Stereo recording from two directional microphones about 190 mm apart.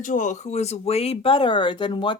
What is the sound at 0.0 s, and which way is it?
Speech, 40° left (ahead or behind).